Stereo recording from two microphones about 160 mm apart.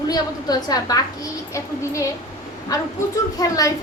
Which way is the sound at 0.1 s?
25° left (ahead or behind).